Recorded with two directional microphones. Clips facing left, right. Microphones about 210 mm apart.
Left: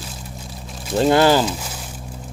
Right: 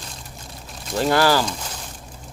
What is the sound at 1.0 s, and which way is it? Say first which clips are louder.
Speech: left 4 dB; 20° left (ahead or behind).